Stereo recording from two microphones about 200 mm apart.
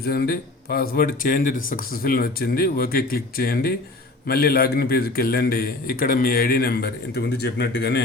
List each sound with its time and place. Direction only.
0.0 s speech: 50° left (ahead or behind)